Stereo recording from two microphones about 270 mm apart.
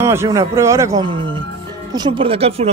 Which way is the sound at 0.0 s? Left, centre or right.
Centre.